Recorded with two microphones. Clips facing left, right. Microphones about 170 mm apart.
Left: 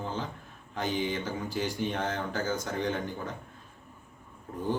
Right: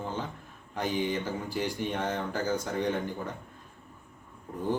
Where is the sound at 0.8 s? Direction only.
5° right (ahead or behind).